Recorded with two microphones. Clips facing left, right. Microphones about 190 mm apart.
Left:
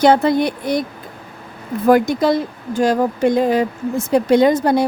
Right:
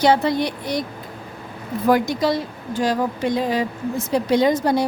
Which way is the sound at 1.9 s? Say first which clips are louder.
Left 5 dB; 50° left (ahead or behind).